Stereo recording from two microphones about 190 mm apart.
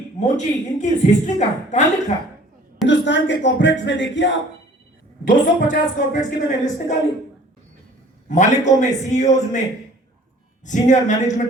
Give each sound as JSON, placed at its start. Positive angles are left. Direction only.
{"t": 0.2, "sound": "a woman's voice", "side_deg": 40}
{"t": 2.8, "sound": "speech", "side_deg": 70}
{"t": 5.2, "sound": "a woman's voice", "side_deg": 45}
{"t": 8.4, "sound": "a woman's voice", "side_deg": 40}